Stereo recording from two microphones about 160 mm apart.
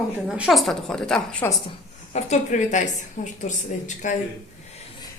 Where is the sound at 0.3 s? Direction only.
Centre (ahead or behind).